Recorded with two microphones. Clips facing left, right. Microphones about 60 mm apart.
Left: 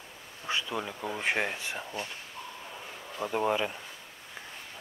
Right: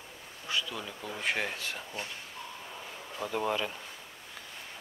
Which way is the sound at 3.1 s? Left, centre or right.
Centre.